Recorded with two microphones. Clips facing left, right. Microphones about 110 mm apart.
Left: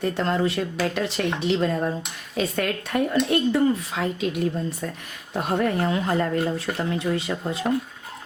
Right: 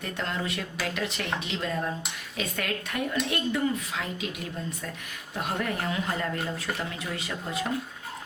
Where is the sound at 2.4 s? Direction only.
35° left (ahead or behind).